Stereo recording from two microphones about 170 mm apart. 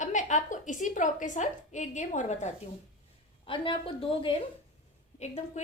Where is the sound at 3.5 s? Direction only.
30° left (ahead or behind).